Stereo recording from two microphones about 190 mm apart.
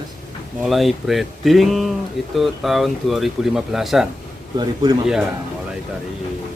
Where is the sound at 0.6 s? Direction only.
Centre (ahead or behind).